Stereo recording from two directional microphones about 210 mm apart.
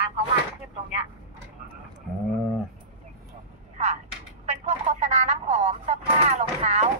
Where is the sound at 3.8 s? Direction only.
35° right (ahead or behind).